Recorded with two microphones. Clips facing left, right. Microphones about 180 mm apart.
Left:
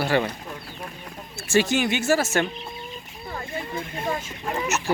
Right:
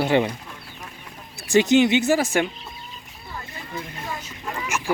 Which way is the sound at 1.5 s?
20° right (ahead or behind).